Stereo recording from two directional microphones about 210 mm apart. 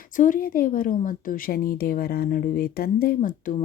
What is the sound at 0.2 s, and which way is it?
A woman's voice, 40° left (ahead or behind).